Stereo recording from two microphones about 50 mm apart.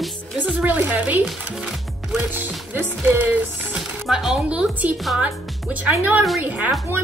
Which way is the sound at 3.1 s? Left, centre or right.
Right.